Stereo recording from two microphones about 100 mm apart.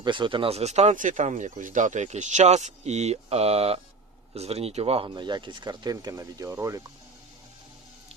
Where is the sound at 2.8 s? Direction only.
90° right; by 6.8 s 30° right (ahead or behind).